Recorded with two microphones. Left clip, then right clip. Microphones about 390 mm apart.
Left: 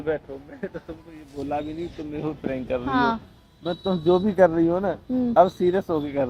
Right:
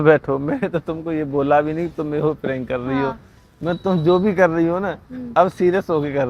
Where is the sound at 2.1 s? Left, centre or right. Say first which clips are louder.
Right 11 dB; right.